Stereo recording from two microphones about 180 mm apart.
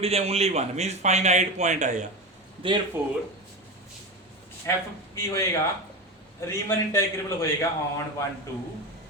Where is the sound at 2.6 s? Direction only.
30° right (ahead or behind).